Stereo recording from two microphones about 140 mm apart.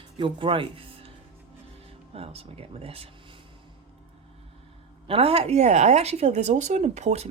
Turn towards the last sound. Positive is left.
turn(degrees=-55)  # may be behind; listen again after turning